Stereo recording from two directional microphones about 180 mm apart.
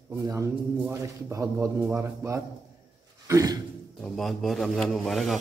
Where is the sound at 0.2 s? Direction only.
15° right (ahead or behind).